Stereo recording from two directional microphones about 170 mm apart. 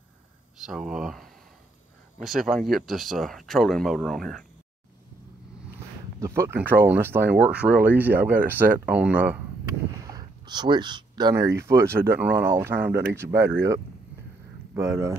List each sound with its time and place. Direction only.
0.6 s speech: 5° right (ahead or behind)
6.1 s speech: 15° right (ahead or behind)
10.0 s speech: 25° right (ahead or behind)